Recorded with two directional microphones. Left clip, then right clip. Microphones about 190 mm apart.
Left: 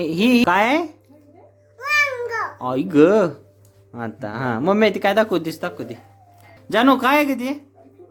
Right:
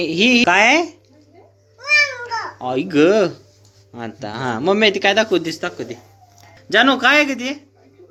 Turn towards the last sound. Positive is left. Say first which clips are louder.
# right 3 dB
turn(degrees=25)  # may be behind; listen again after turning